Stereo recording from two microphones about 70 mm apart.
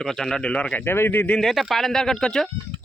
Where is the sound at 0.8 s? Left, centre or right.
Left.